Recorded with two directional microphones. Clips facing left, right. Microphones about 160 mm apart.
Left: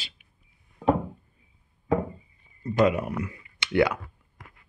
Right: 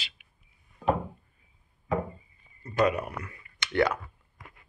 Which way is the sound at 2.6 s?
20° left (ahead or behind).